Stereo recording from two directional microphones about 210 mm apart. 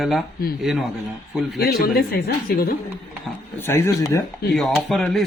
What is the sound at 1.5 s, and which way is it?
Speech, 45° left (ahead or behind).